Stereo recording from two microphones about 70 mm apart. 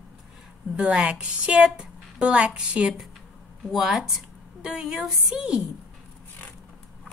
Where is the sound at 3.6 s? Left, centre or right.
Centre.